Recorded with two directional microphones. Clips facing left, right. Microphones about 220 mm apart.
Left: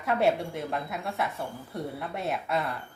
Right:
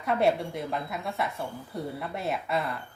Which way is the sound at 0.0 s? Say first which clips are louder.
Even; centre (ahead or behind).